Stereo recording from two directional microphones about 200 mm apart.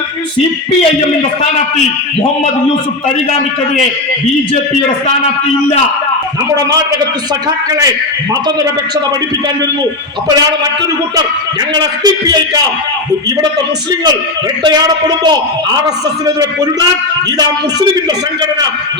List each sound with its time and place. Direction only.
11.7 s a man's voice: 20° right (ahead or behind)